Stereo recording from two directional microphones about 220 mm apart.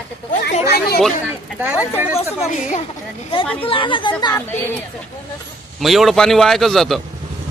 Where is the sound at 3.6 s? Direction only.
25° left (ahead or behind).